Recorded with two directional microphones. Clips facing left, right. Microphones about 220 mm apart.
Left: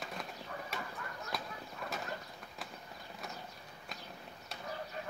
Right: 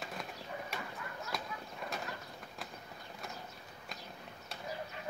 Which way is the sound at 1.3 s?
Centre (ahead or behind).